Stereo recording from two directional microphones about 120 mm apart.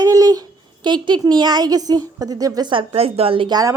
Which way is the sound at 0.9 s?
40° right (ahead or behind).